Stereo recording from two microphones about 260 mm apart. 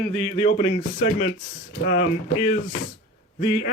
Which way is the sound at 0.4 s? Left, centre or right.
Left.